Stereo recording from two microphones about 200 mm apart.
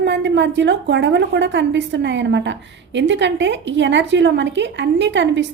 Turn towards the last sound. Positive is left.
turn(degrees=-65)  # may be behind; listen again after turning